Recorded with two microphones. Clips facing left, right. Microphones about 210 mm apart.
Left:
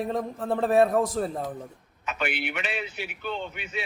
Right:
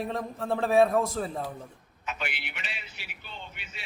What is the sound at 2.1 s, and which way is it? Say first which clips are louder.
A man's voice: left 7 dB; 55° left (ahead or behind).